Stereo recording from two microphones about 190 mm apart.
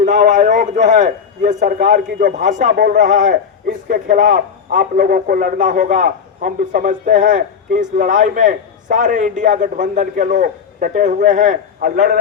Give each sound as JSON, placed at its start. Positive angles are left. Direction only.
{"t": 0.0, "sound": "a man's voice", "side_deg": -40}